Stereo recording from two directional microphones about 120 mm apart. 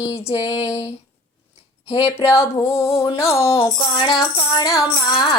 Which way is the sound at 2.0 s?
20° left (ahead or behind).